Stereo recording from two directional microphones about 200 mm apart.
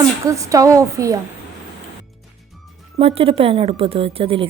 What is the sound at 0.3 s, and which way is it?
Speech, 15° right (ahead or behind).